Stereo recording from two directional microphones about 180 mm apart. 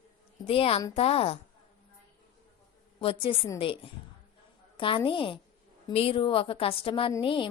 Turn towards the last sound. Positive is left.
turn(degrees=30)  # may be behind; listen again after turning